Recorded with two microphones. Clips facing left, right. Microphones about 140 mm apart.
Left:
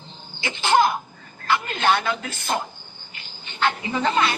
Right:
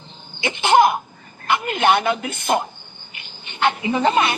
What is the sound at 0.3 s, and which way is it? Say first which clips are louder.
Cough: right 4 dB; 20° right (ahead or behind).